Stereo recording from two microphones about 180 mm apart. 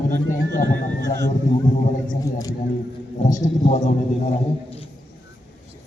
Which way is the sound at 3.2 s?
45° left (ahead or behind).